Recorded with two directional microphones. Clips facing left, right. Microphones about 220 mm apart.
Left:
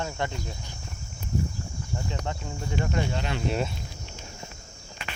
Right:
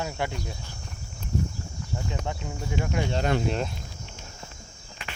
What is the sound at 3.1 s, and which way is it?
Speech, 45° right (ahead or behind).